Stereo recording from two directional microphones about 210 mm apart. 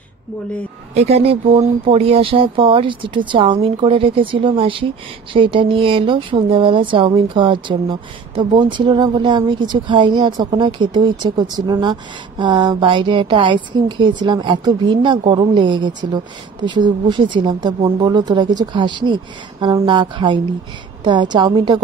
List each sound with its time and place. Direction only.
0.9 s speech: 30° right (ahead or behind)